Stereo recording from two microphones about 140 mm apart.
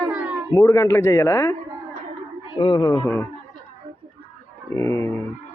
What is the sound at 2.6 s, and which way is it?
Speech, 35° left (ahead or behind).